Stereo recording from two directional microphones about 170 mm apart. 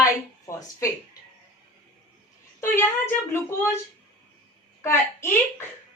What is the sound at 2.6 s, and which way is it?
Speech, 15° left (ahead or behind).